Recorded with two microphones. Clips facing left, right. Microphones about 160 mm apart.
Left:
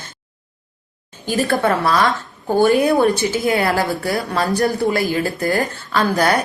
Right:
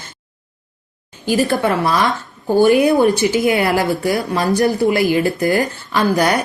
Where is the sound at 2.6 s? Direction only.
Centre (ahead or behind).